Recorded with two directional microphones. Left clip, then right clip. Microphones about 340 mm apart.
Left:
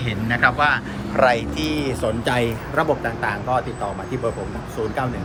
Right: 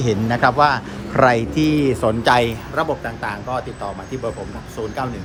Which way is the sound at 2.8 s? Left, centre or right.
Centre.